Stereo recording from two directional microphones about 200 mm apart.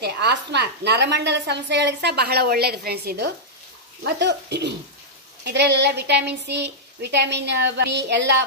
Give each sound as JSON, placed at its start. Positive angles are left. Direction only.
{"t": 0.0, "sound": "a woman's voice", "side_deg": -55}